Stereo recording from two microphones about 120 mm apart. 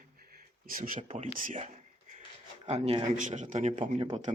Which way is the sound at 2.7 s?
60° right (ahead or behind).